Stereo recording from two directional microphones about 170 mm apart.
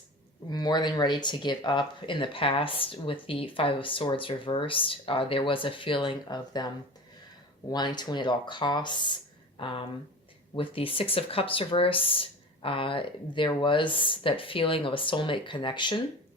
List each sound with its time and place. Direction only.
0.5 s speech: 25° left (ahead or behind)
7.7 s speech: 25° left (ahead or behind)